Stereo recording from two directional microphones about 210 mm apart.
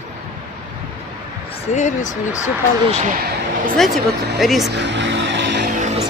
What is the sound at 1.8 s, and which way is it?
Speech, 35° left (ahead or behind).